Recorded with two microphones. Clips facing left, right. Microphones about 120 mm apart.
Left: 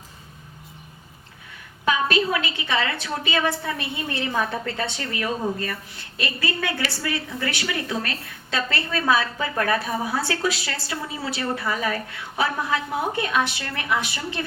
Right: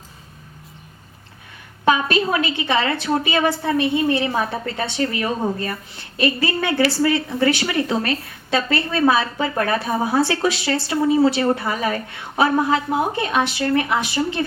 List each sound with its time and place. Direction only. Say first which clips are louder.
1.8 s speech: right 4 dB; 30° right (ahead or behind)